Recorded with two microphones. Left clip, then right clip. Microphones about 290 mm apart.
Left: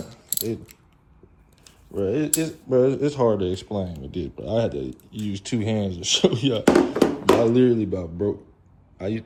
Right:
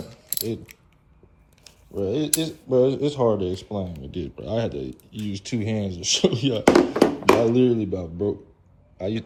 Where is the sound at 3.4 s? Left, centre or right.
Centre.